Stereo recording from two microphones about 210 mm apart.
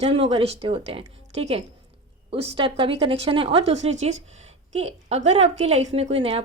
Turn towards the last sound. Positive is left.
turn(degrees=-30)  # may be behind; listen again after turning